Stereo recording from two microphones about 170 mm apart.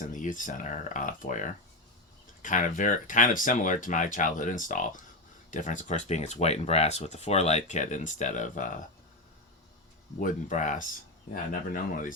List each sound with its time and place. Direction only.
0.0 s speech: 50° left (ahead or behind)
10.2 s speech: 50° left (ahead or behind)